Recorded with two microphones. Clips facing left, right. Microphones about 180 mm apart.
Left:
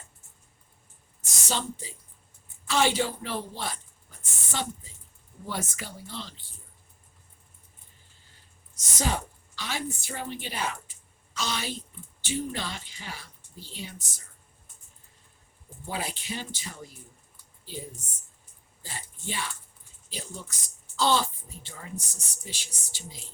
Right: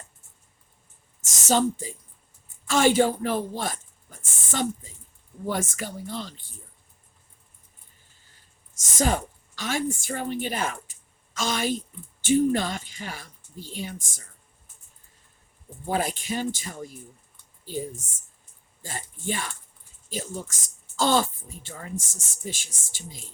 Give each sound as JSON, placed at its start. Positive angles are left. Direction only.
{"t": 1.5, "sound": "speech", "side_deg": -45}
{"t": 9.0, "sound": "speech", "side_deg": -50}
{"t": 15.9, "sound": "speech", "side_deg": -50}
{"t": 18.0, "sound": "speech", "side_deg": -45}